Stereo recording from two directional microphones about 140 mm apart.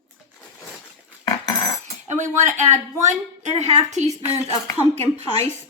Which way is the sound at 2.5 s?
60° right (ahead or behind).